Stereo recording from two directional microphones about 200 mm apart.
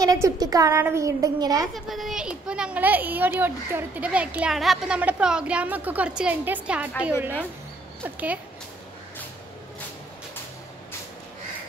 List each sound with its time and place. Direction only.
0.0 s speech: 20° right (ahead or behind)
1.9 s speech: centre (ahead or behind)